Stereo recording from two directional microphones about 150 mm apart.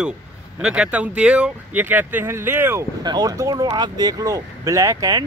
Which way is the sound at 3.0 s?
25° right (ahead or behind).